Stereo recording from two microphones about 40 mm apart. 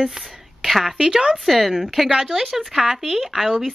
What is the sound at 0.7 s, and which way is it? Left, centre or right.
Speech, centre.